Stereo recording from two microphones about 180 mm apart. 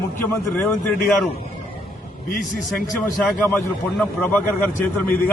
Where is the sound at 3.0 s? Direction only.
5° left (ahead or behind).